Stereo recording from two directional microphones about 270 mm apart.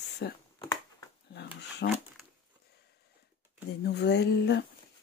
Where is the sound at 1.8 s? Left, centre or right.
Left.